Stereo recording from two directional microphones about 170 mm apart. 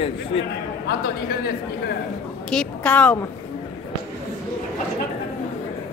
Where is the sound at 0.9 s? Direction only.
65° left (ahead or behind).